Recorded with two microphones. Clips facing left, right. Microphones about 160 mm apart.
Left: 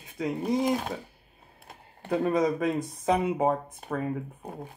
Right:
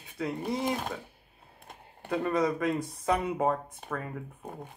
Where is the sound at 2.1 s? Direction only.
20° left (ahead or behind).